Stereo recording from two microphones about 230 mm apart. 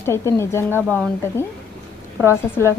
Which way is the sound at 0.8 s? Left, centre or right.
Centre.